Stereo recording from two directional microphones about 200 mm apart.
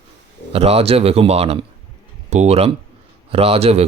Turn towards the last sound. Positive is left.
turn(degrees=-30)  # may be behind; listen again after turning